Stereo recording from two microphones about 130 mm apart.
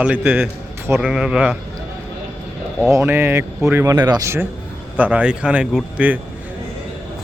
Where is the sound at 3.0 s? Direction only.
15° right (ahead or behind).